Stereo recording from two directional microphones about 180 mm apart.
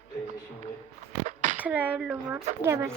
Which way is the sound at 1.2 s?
40° right (ahead or behind).